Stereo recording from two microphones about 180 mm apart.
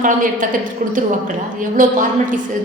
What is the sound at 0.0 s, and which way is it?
Speech, 50° right (ahead or behind).